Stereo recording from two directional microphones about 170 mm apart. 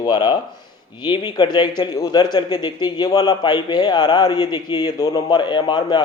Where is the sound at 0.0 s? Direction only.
25° left (ahead or behind).